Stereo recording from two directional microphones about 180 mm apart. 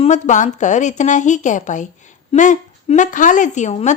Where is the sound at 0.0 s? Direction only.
40° left (ahead or behind).